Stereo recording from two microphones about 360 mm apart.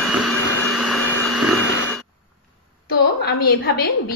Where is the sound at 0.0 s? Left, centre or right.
Centre.